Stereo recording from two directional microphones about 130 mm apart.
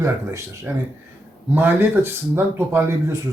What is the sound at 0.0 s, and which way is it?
Speech, 20° right (ahead or behind).